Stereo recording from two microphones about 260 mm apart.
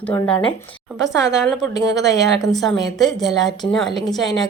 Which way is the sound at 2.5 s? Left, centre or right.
Centre.